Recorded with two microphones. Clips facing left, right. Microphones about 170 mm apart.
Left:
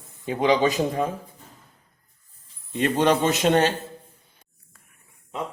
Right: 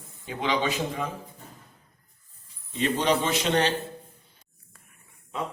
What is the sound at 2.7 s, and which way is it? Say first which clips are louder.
Speech: left 4 dB; 50° left (ahead or behind).